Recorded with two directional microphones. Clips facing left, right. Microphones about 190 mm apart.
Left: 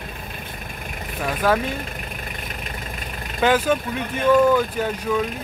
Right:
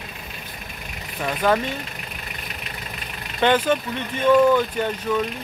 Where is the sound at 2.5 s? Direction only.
45° left (ahead or behind).